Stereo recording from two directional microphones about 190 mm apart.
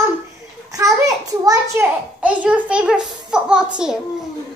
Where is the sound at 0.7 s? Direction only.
20° right (ahead or behind).